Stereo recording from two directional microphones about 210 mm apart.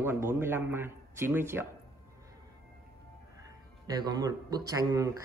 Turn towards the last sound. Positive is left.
turn(degrees=-15)  # may be behind; listen again after turning